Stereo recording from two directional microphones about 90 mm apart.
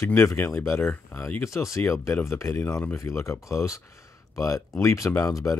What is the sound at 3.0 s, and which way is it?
Speech, 30° left (ahead or behind).